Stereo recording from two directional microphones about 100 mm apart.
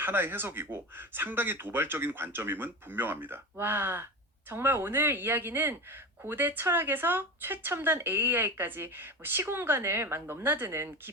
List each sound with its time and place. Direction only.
0.0 s speech: 20° right (ahead or behind)